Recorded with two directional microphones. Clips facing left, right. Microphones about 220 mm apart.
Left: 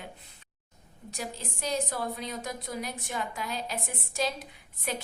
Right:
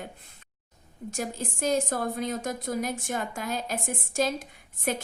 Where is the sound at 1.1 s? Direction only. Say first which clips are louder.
Right 5 dB; 50° right (ahead or behind).